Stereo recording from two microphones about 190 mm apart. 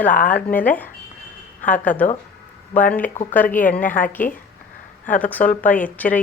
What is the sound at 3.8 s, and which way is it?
Speech, 40° left (ahead or behind).